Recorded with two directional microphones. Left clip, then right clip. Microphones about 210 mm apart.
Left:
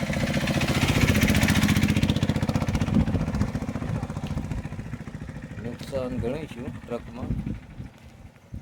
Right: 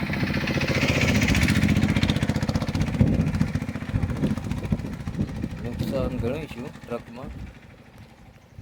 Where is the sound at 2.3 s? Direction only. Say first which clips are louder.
Even; 15° right (ahead or behind); by 5.4 s 40° right (ahead or behind).